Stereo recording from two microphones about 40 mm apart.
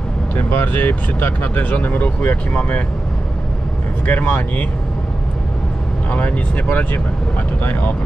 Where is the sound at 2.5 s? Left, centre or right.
Left.